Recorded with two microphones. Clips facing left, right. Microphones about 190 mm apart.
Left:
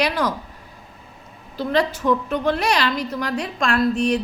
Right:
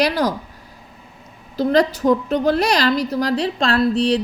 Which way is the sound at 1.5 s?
40° right (ahead or behind).